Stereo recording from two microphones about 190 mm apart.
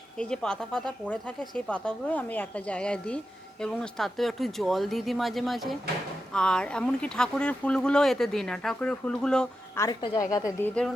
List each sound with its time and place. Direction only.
0.2 s speech: 5° left (ahead or behind)
9.7 s a woman's voice: 15° left (ahead or behind)